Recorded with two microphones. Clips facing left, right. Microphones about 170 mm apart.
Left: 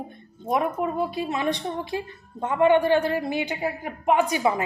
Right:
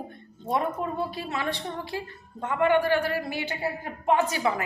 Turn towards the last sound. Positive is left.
turn(degrees=15)  # may be behind; listen again after turning